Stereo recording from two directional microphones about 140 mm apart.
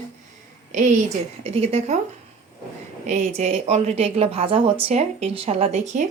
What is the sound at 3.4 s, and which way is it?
A woman's voice, 50° right (ahead or behind).